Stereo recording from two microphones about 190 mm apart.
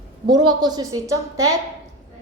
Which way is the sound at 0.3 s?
20° right (ahead or behind).